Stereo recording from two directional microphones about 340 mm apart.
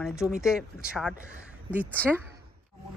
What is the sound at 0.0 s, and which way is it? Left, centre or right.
Speech, centre.